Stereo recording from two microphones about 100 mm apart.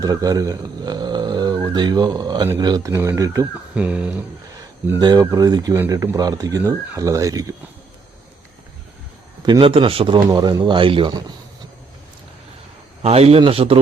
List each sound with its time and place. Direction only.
0.0 s speech: 40° right (ahead or behind)
2.9 s speech: 30° right (ahead or behind)
3.8 s speech: 15° right (ahead or behind)
4.9 s speech: 45° right (ahead or behind)
9.5 s a man's voice: 60° right (ahead or behind)
10.3 s speech: 45° right (ahead or behind)
13.0 s a man's voice: 90° right
13.4 s speech: 70° right (ahead or behind)